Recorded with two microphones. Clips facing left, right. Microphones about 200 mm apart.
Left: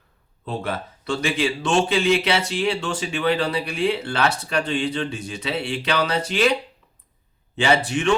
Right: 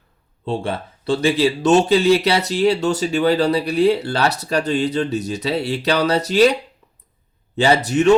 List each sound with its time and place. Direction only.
0.4 s speech: 30° right (ahead or behind)